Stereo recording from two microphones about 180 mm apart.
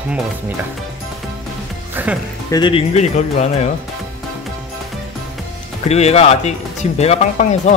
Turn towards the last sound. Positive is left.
turn(degrees=40)  # may be behind; listen again after turning